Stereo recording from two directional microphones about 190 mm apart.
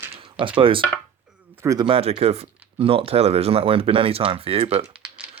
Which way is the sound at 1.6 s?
20° right (ahead or behind).